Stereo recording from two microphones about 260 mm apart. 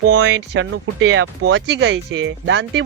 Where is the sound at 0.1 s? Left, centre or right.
Right.